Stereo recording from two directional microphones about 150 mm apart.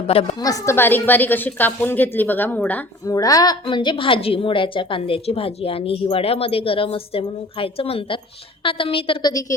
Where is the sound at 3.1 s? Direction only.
25° left (ahead or behind).